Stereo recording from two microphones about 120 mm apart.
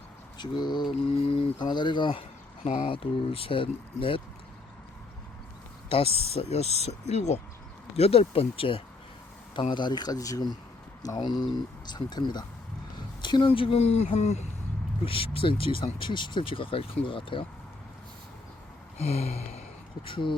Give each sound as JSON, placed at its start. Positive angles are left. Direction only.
{"t": 0.3, "sound": "speech", "side_deg": 35}
{"t": 6.1, "sound": "speech", "side_deg": -55}
{"t": 6.3, "sound": "speech", "side_deg": 60}
{"t": 15.0, "sound": "speech", "side_deg": 50}
{"t": 18.9, "sound": "a sound", "side_deg": 60}
{"t": 20.1, "sound": "speech", "side_deg": 45}